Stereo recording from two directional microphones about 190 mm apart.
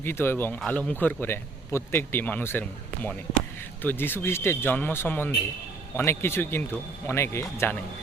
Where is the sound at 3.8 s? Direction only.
10° left (ahead or behind).